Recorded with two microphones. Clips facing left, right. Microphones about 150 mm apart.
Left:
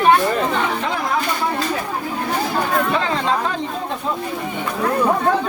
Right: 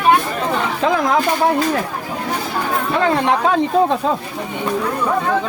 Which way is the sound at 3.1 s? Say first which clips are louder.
Right 5 dB; 65° right (ahead or behind).